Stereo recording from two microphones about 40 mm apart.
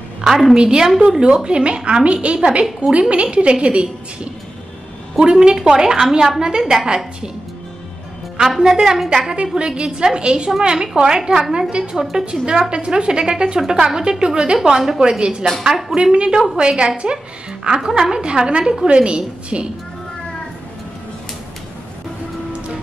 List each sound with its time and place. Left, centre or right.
0.2 s a woman's voice: centre
1.3 s a woman's voice: right; by 6.9 s centre
8.4 s a woman's voice: centre
12.0 s a woman's voice: centre
12.4 s a woman's voice: right
15.6 s a woman's voice: centre
16.0 s a woman's voice: right